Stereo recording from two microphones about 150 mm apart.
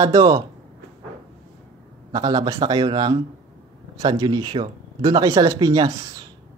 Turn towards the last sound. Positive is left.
turn(degrees=-25)  # may be behind; listen again after turning